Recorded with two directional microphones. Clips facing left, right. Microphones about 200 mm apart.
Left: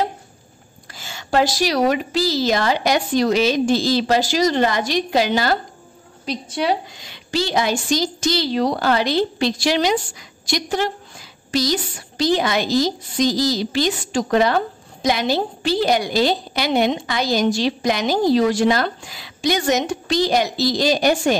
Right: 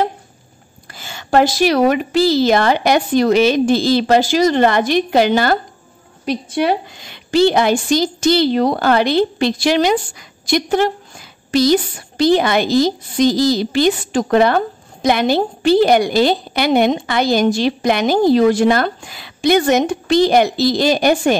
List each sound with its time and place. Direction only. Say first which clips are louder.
0.9 s a woman's voice: right 5 dB; 55° right (ahead or behind)